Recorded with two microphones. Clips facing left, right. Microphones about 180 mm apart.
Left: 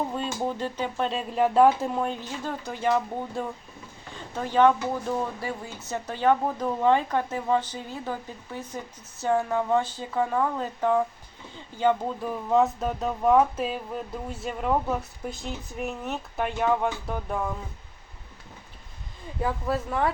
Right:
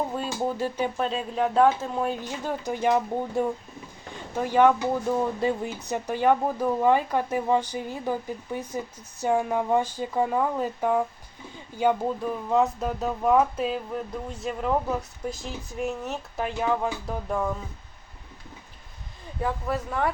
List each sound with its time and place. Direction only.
0.1 s speech: 5° right (ahead or behind)
2.0 s speech: 10° right (ahead or behind)
12.2 s speech: centre (ahead or behind)
19.4 s speech: 5° left (ahead or behind)